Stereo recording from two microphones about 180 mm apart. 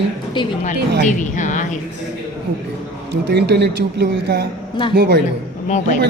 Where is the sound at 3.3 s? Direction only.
65° right (ahead or behind).